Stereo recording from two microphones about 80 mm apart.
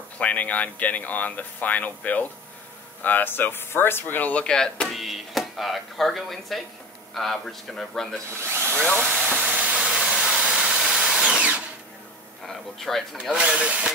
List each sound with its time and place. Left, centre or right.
0.2 s a man's voice: centre
8.5 s drill: right
8.7 s speech: centre
9.5 s a sound: centre
12.7 s a man's voice: centre
13.3 s speech: centre